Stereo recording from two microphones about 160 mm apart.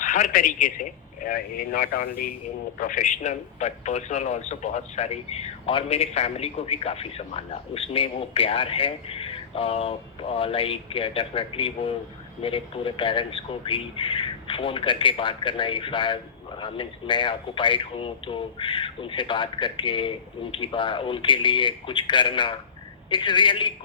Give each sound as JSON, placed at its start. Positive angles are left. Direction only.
{"t": 0.0, "sound": "speech", "side_deg": 55}